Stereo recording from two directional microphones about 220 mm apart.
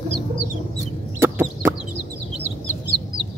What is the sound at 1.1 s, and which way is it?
Chicken, 10° right (ahead or behind).